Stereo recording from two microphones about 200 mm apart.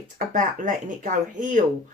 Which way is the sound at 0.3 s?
40° right (ahead or behind).